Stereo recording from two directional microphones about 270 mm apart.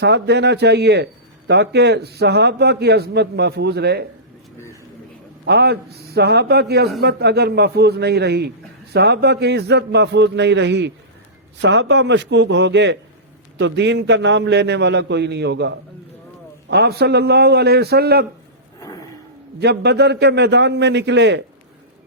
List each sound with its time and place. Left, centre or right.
0.0 s a man's voice: right
5.5 s a man's voice: right
18.8 s a sound: centre
19.5 s a man's voice: right